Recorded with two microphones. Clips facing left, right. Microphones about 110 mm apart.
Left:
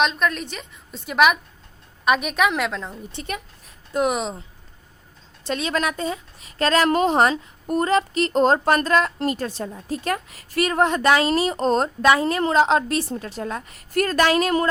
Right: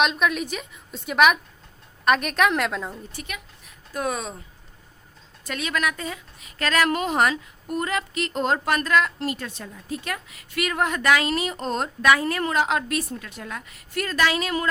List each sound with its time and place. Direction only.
0.0 s a woman's voice: 5° right (ahead or behind)
3.9 s speech: 20° left (ahead or behind)
5.5 s a woman's voice: 30° left (ahead or behind)